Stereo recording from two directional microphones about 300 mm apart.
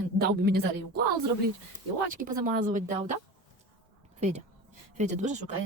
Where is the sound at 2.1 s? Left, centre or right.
Right.